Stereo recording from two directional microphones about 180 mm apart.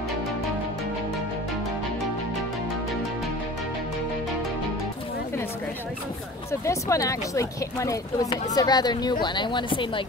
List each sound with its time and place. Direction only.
6.6 s speech: 15° left (ahead or behind)